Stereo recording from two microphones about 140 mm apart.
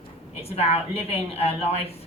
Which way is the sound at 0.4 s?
45° left (ahead or behind).